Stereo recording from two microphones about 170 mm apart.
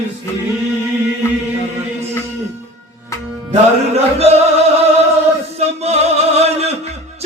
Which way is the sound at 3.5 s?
40° right (ahead or behind).